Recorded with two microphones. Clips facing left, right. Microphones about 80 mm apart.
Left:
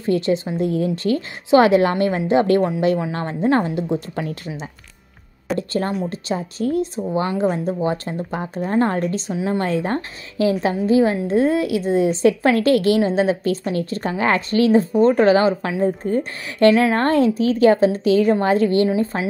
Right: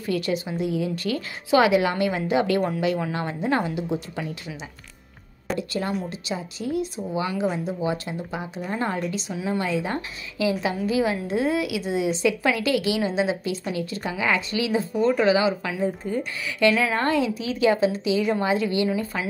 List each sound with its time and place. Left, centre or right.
0.0 s a woman's voice: left
0.6 s a woman's voice: left
18.9 s speech: left